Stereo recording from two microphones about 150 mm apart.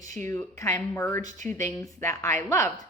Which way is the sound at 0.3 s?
20° left (ahead or behind).